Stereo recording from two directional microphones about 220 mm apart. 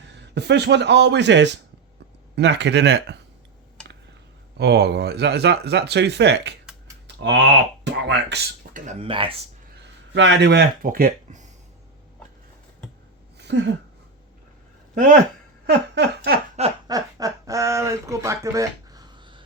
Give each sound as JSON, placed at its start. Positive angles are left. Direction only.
{"t": 0.0, "sound": "a man's voice", "side_deg": -50}
{"t": 4.5, "sound": "speech", "side_deg": -50}
{"t": 8.7, "sound": "speech", "side_deg": -30}
{"t": 10.2, "sound": "speech", "side_deg": -55}
{"t": 13.4, "sound": "a sound", "side_deg": -50}
{"t": 14.9, "sound": "speech", "side_deg": -35}
{"t": 15.6, "sound": "giggle", "side_deg": -45}
{"t": 16.6, "sound": "speech", "side_deg": -25}